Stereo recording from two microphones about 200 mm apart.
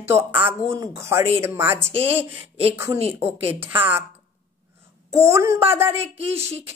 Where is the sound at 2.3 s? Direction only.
30° right (ahead or behind).